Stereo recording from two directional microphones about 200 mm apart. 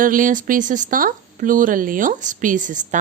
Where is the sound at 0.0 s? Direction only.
40° right (ahead or behind).